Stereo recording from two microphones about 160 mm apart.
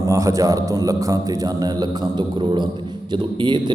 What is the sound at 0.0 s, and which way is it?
A man's voice, 20° right (ahead or behind).